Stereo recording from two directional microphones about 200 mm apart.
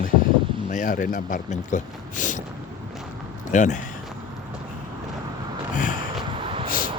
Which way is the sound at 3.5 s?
35° left (ahead or behind).